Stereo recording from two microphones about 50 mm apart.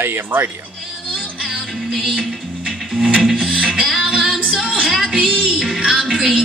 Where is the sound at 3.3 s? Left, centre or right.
Centre.